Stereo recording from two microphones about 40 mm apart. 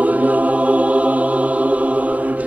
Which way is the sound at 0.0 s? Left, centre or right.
Right.